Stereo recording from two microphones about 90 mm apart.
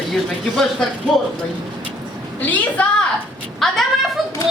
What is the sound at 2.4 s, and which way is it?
Speech, 20° left (ahead or behind).